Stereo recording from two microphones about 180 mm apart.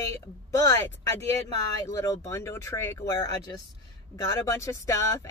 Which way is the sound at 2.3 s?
15° left (ahead or behind).